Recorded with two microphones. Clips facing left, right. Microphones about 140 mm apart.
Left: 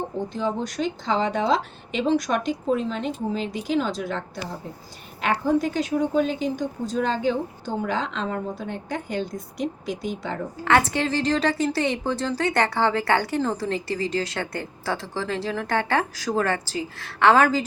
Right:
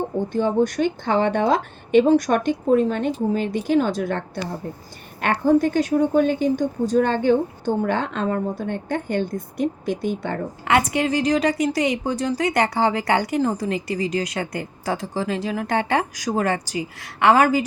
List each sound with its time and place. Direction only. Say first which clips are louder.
0.3 s a woman's voice: right 8 dB; 50° right (ahead or behind)
5.2 s a woman's voice: right 4 dB; 50° right (ahead or behind)
10.7 s a woman's voice: right 1 dB; 15° right (ahead or behind)